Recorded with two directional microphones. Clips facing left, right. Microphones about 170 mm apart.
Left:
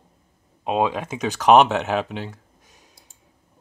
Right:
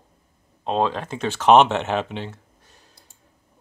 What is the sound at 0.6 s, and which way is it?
Speech, 10° left (ahead or behind).